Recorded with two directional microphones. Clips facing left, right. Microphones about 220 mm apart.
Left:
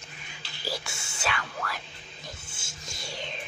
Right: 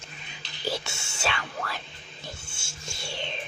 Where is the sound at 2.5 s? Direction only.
30° right (ahead or behind).